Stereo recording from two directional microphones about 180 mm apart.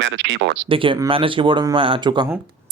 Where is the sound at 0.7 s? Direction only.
30° right (ahead or behind).